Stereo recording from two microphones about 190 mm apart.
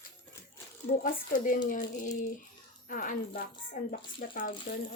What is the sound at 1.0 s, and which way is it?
Speech, 45° left (ahead or behind).